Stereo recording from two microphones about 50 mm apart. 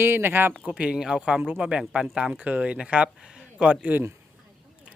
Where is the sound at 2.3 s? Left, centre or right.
Right.